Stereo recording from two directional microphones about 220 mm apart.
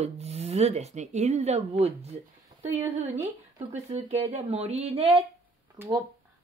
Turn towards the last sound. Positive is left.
turn(degrees=-10)  # may be behind; listen again after turning